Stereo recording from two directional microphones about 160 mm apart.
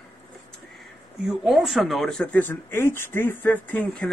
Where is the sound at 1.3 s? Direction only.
5° right (ahead or behind).